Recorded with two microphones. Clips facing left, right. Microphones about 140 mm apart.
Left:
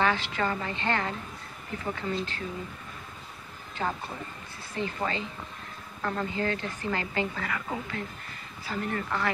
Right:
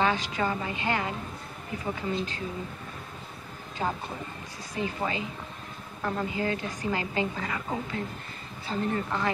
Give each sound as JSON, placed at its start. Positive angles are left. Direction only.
{"t": 0.0, "sound": "a woman's voice", "side_deg": -15}
{"t": 3.8, "sound": "a woman's voice", "side_deg": -15}